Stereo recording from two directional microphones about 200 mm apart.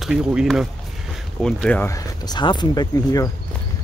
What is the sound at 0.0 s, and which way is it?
Speech, 5° right (ahead or behind).